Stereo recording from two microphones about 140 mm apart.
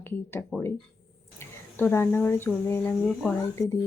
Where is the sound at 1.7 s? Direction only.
15° left (ahead or behind).